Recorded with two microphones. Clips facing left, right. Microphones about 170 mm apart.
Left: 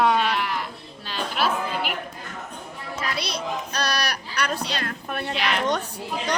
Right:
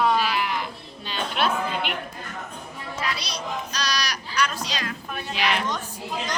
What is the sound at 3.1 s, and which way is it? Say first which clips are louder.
Speech: left 3 dB; 55° left (ahead or behind).